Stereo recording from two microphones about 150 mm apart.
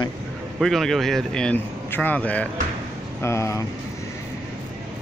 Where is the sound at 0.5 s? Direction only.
Centre (ahead or behind).